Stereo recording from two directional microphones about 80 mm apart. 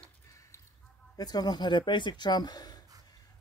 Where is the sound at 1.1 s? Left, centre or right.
Left.